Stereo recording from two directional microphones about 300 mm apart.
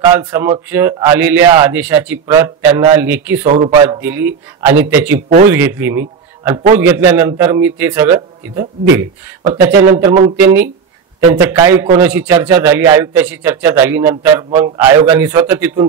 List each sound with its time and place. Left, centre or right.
0.0 s a man's voice: centre
3.4 s speech: right
3.8 s a man's voice: centre